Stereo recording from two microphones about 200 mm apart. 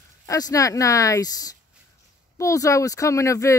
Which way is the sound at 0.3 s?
15° left (ahead or behind).